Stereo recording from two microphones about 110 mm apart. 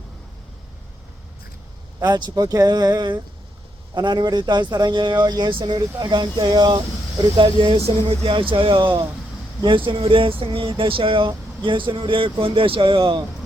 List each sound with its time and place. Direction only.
2.0 s speech: 40° right (ahead or behind)